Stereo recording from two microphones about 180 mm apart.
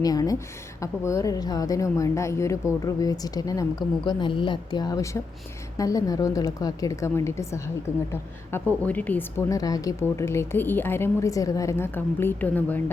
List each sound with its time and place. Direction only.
0.0 s a woman's voice: 20° left (ahead or behind)
8.8 s speech: 10° left (ahead or behind)